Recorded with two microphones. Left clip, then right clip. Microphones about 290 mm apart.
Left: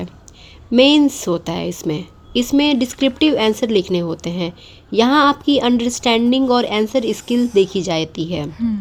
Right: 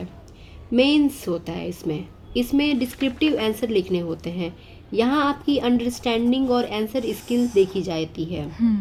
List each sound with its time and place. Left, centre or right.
0.7 s speech: left
8.5 s speech: centre